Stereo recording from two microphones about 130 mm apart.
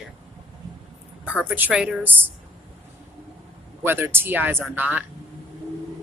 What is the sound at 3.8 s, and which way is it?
Speech, 15° right (ahead or behind).